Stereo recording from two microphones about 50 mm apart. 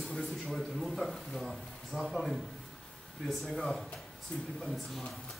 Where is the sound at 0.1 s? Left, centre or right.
Centre.